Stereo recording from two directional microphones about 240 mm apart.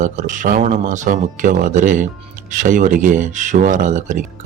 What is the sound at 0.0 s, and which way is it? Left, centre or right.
Speech, right.